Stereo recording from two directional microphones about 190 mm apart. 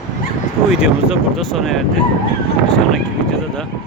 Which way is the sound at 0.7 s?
5° right (ahead or behind).